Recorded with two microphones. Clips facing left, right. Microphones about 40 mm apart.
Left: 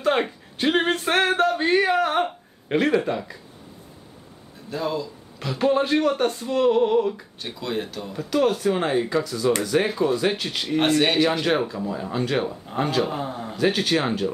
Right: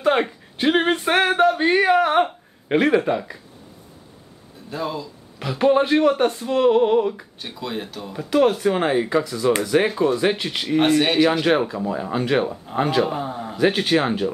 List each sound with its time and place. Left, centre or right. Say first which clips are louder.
0.0 s speech: right 3 dB; centre
4.6 s a man's voice: left 1 dB; centre
13.6 s speech: right 3 dB; centre